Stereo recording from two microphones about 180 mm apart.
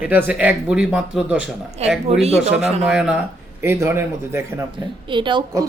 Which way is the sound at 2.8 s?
5° right (ahead or behind).